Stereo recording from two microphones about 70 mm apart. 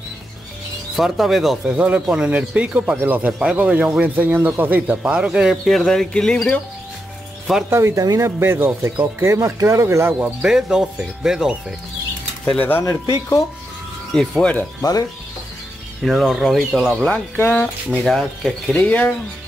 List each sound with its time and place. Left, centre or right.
0.9 s speech: centre
1.8 s speech: centre
5.7 s speech: centre
7.7 s speech: right
8.0 s speech: right
8.4 s speech: right
8.8 s speech: right
10.2 s speech: centre
12.5 s speech: left
12.8 s speech: left
14.1 s speech: centre
14.8 s speech: left
16.1 s speech: centre
18.8 s speech: left